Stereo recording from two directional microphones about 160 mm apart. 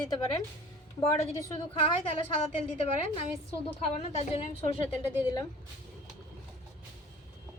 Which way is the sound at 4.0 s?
45° left (ahead or behind).